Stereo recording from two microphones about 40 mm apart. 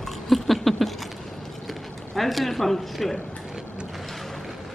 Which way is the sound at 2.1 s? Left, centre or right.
Centre.